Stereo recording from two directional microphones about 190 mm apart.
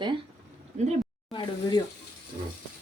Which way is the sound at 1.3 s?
20° left (ahead or behind).